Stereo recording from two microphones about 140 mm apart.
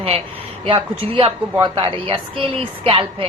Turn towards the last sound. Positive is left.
turn(degrees=-40)  # may be behind; listen again after turning